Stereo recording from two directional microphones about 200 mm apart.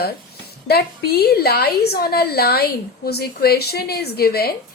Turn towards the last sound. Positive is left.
turn(degrees=50)  # may be behind; listen again after turning